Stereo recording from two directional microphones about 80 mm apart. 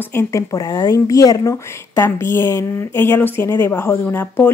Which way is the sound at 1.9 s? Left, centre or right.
Left.